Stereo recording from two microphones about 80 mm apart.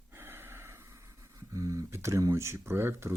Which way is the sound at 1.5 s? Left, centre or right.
Right.